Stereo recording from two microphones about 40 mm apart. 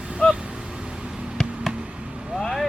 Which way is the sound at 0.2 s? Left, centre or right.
Left.